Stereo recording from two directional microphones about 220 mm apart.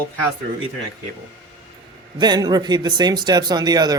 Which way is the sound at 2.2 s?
20° right (ahead or behind).